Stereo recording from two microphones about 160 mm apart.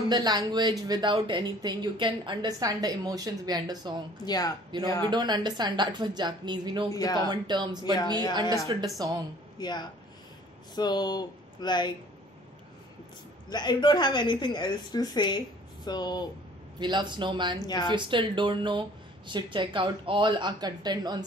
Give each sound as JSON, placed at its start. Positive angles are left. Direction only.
{"t": 0.1, "sound": "speech", "side_deg": -25}
{"t": 4.3, "sound": "a woman's voice", "side_deg": 25}
{"t": 5.1, "sound": "speech", "side_deg": -25}
{"t": 9.6, "sound": "a woman's voice", "side_deg": 25}
{"t": 13.5, "sound": "a woman's voice", "side_deg": 25}
{"t": 16.8, "sound": "speech", "side_deg": -30}
{"t": 17.6, "sound": "a woman's voice", "side_deg": 25}
{"t": 17.9, "sound": "speech", "side_deg": -30}